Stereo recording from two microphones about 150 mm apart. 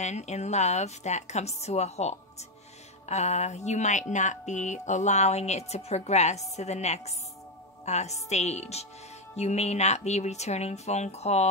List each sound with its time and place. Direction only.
0.0 s speech: 50° left (ahead or behind)